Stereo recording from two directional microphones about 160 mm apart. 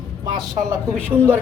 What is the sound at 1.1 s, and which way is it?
Speech, 10° right (ahead or behind).